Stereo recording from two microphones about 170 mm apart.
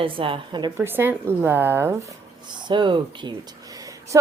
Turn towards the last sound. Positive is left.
turn(degrees=-20)  # may be behind; listen again after turning